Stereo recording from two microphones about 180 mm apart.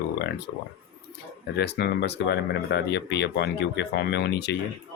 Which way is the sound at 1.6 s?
65° left (ahead or behind).